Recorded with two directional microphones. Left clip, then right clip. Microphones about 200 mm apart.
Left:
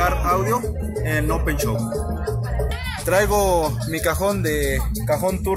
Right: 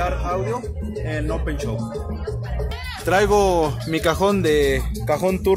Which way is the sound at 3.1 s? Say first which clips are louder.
Right 1 dB; 50° right (ahead or behind).